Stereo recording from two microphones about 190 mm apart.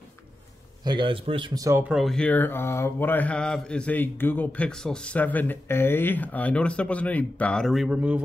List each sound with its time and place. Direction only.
0.8 s speech: 25° right (ahead or behind)
1.9 s speech: centre (ahead or behind)